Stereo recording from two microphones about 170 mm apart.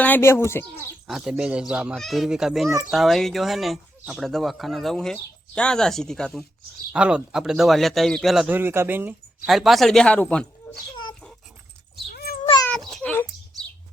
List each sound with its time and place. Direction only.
0.0 s speech: 10° left (ahead or behind)
1.0 s speech: centre (ahead or behind)
9.5 s speech: centre (ahead or behind)
12.1 s cat: 65° left (ahead or behind)
12.9 s a sound: 5° left (ahead or behind)